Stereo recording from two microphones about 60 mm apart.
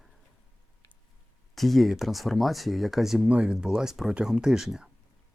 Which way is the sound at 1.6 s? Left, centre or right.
Centre.